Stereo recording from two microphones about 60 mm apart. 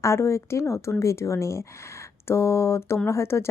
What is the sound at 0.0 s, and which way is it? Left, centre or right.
Speech, left.